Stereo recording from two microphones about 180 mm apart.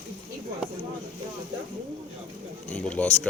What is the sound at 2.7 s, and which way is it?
Speech, 5° left (ahead or behind).